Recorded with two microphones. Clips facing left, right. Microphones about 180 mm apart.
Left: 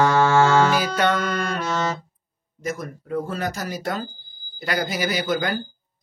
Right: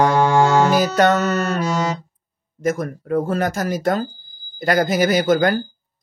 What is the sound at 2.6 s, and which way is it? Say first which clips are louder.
Speech: right 8 dB; 50° right (ahead or behind).